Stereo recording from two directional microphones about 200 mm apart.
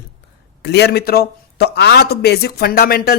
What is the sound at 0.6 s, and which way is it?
A man's voice, 55° left (ahead or behind).